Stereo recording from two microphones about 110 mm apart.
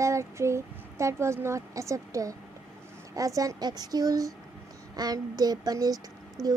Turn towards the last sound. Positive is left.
turn(degrees=-35)  # may be behind; listen again after turning